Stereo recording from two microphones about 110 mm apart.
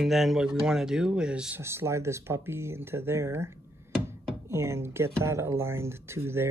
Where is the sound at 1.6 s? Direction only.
25° right (ahead or behind).